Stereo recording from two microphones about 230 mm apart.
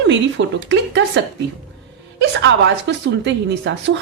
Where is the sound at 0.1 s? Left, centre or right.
Right.